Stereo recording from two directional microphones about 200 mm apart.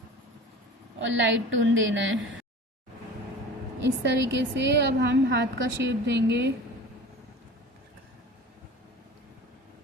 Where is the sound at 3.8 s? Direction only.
60° right (ahead or behind).